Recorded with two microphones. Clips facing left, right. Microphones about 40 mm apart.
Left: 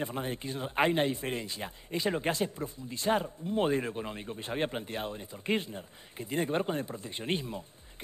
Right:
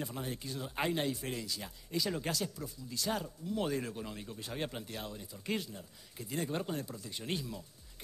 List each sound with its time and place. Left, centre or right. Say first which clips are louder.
0.0 s speech: left 5 dB; left